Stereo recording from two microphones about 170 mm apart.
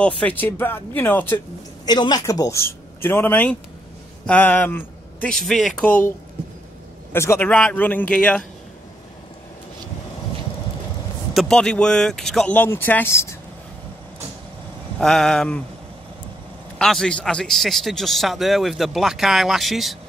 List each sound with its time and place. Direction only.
0.0 s a man's voice: 10° left (ahead or behind)
1.9 s a man's voice: 25° left (ahead or behind); by 8.5 s 5° left (ahead or behind)
11.3 s a man's voice: 5° left (ahead or behind)
15.0 s a man's voice: 5° left (ahead or behind)
16.7 s a man's voice: 5° left (ahead or behind)